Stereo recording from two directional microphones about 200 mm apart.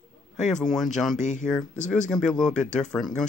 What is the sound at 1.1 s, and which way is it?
Speech, 35° left (ahead or behind).